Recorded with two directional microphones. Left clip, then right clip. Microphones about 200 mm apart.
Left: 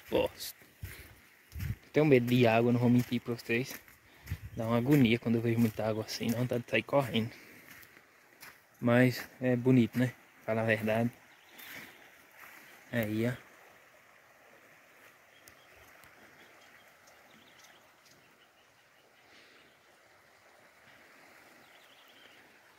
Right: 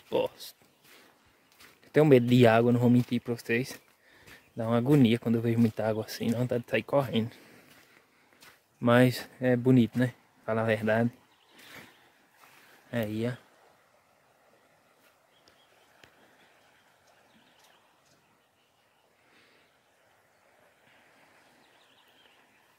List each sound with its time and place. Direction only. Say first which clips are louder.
0.1 s a sound: right 1 dB; 5° right (ahead or behind)
1.9 s speech: right 5 dB; 30° right (ahead or behind)
8.8 s speech: right 4 dB; 20° right (ahead or behind)
12.9 s speech: right 1 dB; 5° right (ahead or behind)